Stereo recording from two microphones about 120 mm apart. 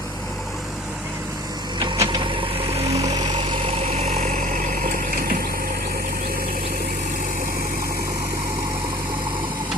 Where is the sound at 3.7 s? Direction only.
65° right (ahead or behind); by 4.9 s 90° right.